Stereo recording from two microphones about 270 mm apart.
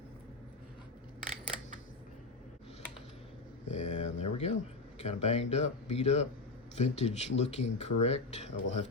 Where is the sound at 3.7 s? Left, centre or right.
Left.